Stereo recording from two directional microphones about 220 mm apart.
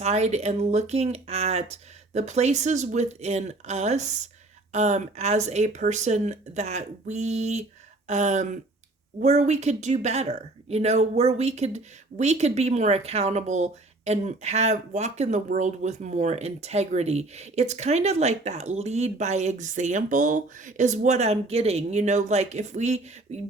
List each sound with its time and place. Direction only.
0.0 s a woman's voice: 30° right (ahead or behind)